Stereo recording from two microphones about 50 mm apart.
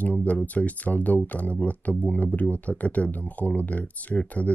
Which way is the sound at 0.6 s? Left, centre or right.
Left.